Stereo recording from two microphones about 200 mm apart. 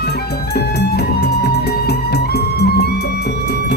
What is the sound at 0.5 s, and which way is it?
Music, 55° left (ahead or behind).